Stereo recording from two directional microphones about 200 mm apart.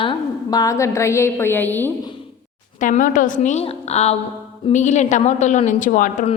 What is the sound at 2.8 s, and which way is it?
A woman's voice, 40° left (ahead or behind).